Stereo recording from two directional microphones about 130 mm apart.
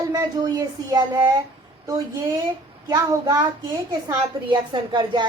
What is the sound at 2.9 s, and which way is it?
Speech, 30° right (ahead or behind).